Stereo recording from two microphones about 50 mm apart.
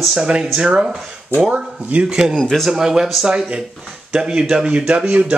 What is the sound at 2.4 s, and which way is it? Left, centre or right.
Speech, centre.